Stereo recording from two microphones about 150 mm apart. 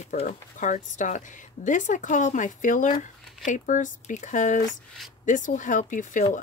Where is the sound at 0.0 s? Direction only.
50° left (ahead or behind).